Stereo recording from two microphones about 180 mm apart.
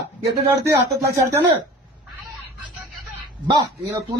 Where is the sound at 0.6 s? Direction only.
15° right (ahead or behind).